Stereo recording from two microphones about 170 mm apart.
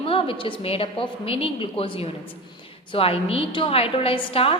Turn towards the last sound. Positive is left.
turn(degrees=35)  # may be behind; listen again after turning